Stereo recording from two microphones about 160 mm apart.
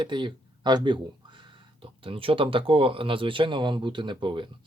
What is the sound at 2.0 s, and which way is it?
Speech, 35° right (ahead or behind).